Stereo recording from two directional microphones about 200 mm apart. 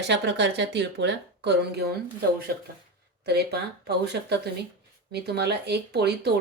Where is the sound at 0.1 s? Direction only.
60° right (ahead or behind).